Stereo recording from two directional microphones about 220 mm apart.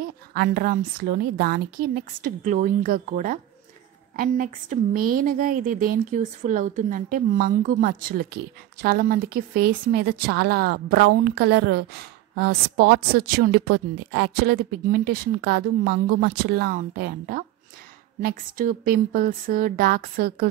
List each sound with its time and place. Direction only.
0.3 s a woman's voice: 45° right (ahead or behind)